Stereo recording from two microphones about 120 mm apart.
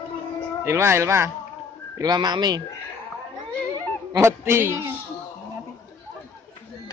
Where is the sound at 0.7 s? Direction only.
20° right (ahead or behind).